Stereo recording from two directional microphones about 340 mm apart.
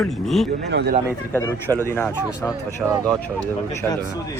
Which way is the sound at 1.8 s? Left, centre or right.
Centre.